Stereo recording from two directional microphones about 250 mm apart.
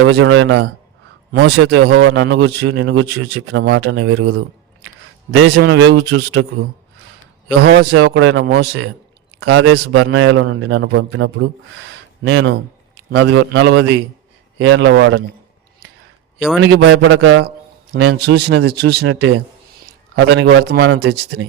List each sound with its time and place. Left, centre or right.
0.0 s a man's voice: right
7.6 s a man's voice: right
16.6 s a man's voice: right
17.9 s a man's voice: right